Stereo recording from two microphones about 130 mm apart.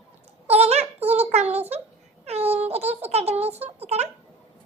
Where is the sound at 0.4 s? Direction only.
55° right (ahead or behind).